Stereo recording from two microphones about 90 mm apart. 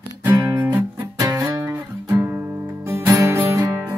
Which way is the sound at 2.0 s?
30° right (ahead or behind).